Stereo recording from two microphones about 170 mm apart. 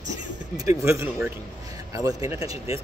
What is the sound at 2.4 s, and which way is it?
Speech, 35° left (ahead or behind).